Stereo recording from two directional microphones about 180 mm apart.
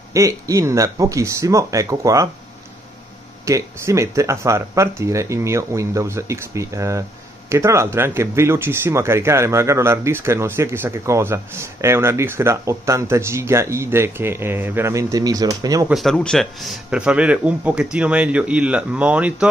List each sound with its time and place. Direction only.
0.1 s speech: 15° right (ahead or behind)
3.4 s speech: 15° right (ahead or behind)
15.9 s a man's voice: centre (ahead or behind)